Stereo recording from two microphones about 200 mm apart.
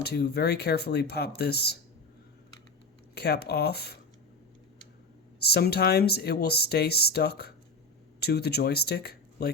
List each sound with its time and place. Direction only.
0.0 s speech: 55° left (ahead or behind)
3.2 s speech: 55° left (ahead or behind)
5.4 s speech: 55° left (ahead or behind)